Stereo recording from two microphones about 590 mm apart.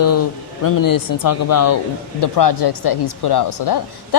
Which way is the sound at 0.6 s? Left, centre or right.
Left.